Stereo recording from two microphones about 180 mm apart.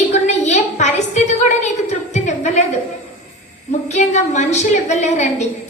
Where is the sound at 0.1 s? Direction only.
40° left (ahead or behind).